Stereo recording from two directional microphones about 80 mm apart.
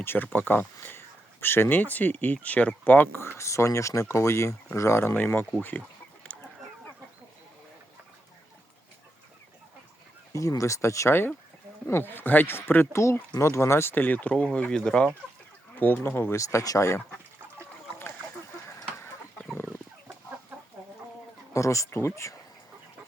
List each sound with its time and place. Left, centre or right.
0.0 s speech: left
5.1 s speech: left
6.3 s a sound: centre
10.3 s speech: left
13.9 s speech: left
15.8 s speech: left
16.4 s speech: left
18.7 s chicken: left
21.5 s speech: left